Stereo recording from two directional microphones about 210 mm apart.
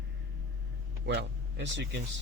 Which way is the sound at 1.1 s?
55° right (ahead or behind).